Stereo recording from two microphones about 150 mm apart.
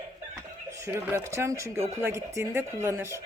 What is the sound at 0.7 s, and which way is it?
Speech, 20° right (ahead or behind).